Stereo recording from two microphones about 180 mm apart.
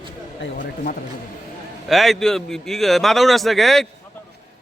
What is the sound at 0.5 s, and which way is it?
Speech, 50° left (ahead or behind).